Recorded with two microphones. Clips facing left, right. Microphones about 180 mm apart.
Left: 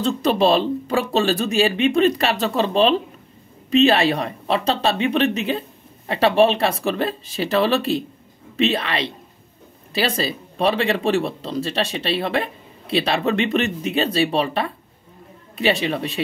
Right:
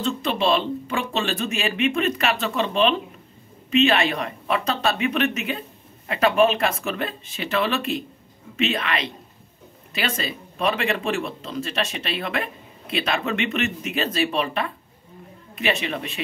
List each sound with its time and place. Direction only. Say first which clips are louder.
0.0 s speech: left 5 dB; 40° left (ahead or behind)